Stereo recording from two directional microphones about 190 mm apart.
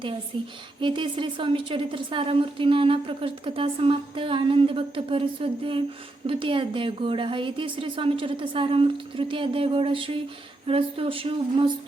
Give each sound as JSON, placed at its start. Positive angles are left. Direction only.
{"t": 0.3, "sound": "a woman's voice", "side_deg": -25}